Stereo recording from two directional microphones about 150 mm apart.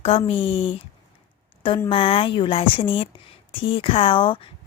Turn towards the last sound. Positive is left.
turn(degrees=35)  # may be behind; listen again after turning